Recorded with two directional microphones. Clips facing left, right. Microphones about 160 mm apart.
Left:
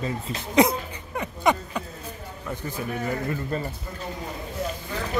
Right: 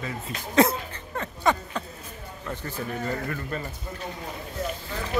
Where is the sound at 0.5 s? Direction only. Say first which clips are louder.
Left 1 dB; 15° left (ahead or behind).